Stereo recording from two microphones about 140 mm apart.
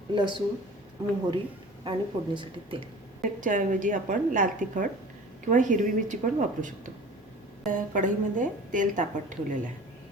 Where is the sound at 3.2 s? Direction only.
70° right (ahead or behind).